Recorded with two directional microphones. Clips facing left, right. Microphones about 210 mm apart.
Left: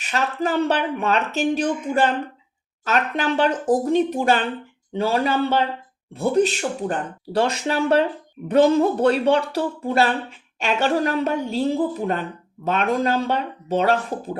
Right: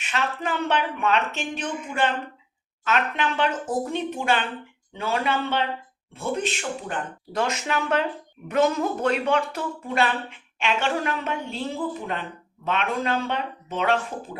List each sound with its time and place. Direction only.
0.0 s speech: 40° left (ahead or behind)